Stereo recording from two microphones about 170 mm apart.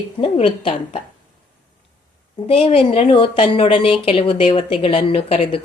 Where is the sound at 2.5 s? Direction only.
35° left (ahead or behind).